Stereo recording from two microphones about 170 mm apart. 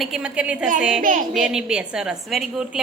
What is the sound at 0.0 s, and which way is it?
A woman's voice, 5° right (ahead or behind).